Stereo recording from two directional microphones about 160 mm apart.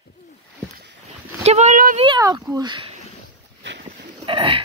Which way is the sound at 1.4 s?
45° right (ahead or behind).